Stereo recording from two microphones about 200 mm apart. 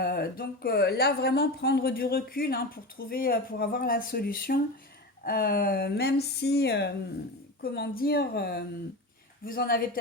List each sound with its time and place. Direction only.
0.0 s speech: 50° left (ahead or behind)